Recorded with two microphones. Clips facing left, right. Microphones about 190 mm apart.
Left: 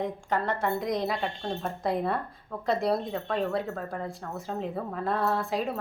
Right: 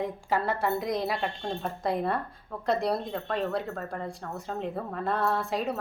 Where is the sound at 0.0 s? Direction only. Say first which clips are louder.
Even; 5° right (ahead or behind).